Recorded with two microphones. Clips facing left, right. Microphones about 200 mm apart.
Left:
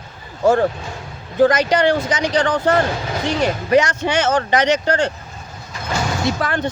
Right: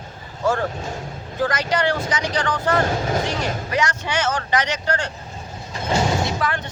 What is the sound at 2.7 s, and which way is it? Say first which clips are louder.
Speech: left 2 dB; 45° right (ahead or behind).